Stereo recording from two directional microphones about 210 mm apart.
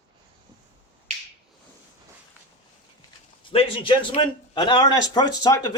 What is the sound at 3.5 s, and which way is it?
Speech, 25° left (ahead or behind).